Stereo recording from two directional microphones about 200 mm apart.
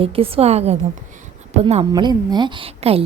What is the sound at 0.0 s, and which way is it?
A woman's voice, 30° right (ahead or behind).